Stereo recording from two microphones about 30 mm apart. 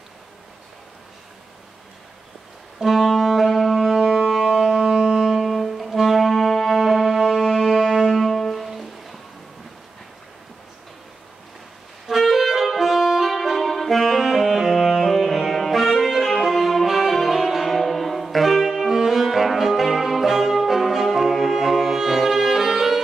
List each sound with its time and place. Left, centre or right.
2.8 s music: centre
4.3 s siren: centre
4.8 s music: right
5.2 s music: centre
5.5 s music: centre
7.5 s music: centre
8.1 s music: centre
12.1 s saxophone: centre
18.9 s music: centre